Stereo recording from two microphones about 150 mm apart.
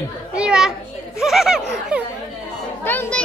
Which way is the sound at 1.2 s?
5° right (ahead or behind).